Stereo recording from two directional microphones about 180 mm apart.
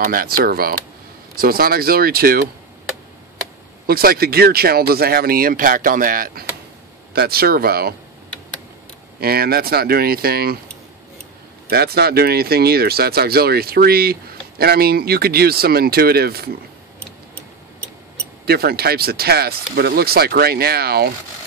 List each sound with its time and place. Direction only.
0.0 s speech: 55° right (ahead or behind)
3.8 s speech: 55° right (ahead or behind)
9.2 s speech: 60° right (ahead or behind)
11.7 s speech: 60° right (ahead or behind)
18.4 s speech: 60° right (ahead or behind)